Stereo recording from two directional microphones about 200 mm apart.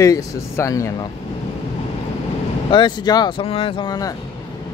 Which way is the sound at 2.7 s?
20° left (ahead or behind).